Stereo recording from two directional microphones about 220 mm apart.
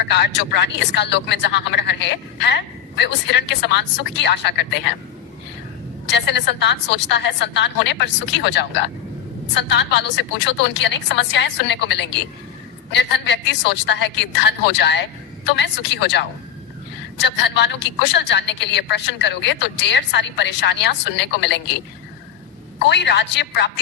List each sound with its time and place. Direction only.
0.0 s speech: 50° left (ahead or behind)
6.1 s speech: 50° left (ahead or behind)
22.8 s speech: 50° left (ahead or behind)